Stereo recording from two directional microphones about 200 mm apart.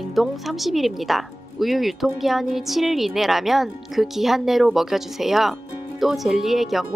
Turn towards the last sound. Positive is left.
turn(degrees=0)  # may be behind; listen again after turning